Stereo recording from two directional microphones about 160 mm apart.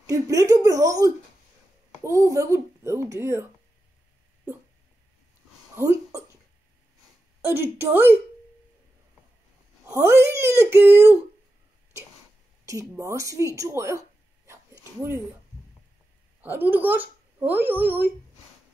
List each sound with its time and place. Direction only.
0.0 s a sound: 20° right (ahead or behind)
2.0 s a child's voice: 20° right (ahead or behind)
5.8 s hiccup: 20° right (ahead or behind)
7.4 s a child's voice: 15° right (ahead or behind)
9.8 s a child's voice: 20° right (ahead or behind)
12.6 s speech: 20° right (ahead or behind)
16.3 s a woman's voice: 10° right (ahead or behind)